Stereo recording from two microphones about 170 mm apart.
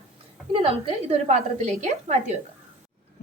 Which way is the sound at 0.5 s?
35° right (ahead or behind).